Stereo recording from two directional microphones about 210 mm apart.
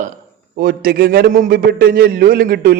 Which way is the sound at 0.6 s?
45° right (ahead or behind).